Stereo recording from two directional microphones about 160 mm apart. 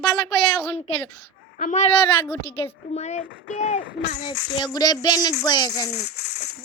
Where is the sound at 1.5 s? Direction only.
50° left (ahead or behind).